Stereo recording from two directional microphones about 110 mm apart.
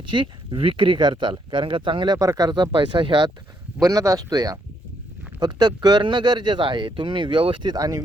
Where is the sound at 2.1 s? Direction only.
30° right (ahead or behind).